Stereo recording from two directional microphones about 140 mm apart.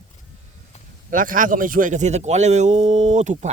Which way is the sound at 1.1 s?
75° right (ahead or behind).